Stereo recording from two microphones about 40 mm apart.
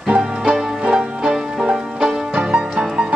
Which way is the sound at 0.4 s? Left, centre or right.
Centre.